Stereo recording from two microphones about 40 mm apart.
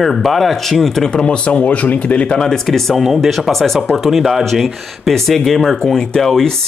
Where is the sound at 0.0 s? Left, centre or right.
Centre.